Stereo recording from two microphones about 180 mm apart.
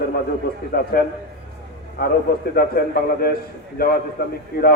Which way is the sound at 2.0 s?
60° left (ahead or behind).